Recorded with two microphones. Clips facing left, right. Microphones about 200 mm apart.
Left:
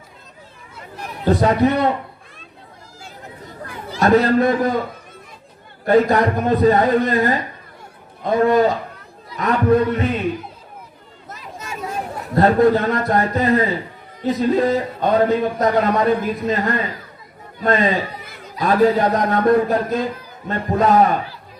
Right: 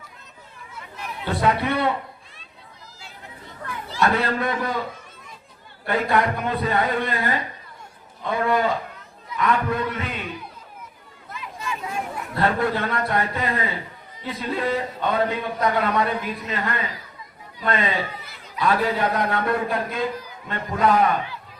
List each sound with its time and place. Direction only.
0.8 s a sound: 40° left (ahead or behind)
3.0 s chatter: 40° left (ahead or behind)
4.0 s speech: 40° left (ahead or behind)
5.8 s speech: 40° left (ahead or behind)
11.3 s chatter: 40° left (ahead or behind)
14.2 s speech: 45° left (ahead or behind)